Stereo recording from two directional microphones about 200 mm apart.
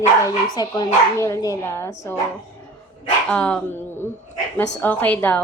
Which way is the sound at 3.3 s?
5° left (ahead or behind).